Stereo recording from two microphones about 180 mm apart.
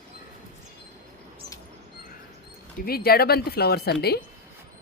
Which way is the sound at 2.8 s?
55° left (ahead or behind).